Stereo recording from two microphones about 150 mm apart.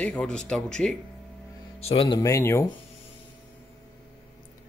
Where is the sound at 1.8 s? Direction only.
40° left (ahead or behind).